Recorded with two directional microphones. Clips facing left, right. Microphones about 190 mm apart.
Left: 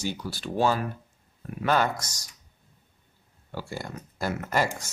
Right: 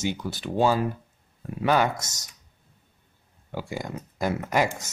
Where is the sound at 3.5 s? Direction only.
15° right (ahead or behind).